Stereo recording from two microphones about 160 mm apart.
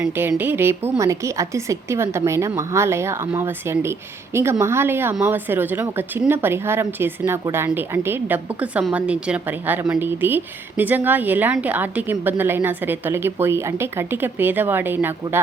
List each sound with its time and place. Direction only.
0.0 s speech: 10° right (ahead or behind)